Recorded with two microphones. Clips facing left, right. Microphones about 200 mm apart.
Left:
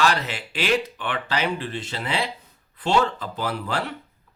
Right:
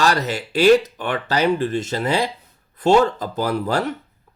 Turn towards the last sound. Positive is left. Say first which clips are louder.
# right 6 dB
turn(degrees=-40)  # may be behind; listen again after turning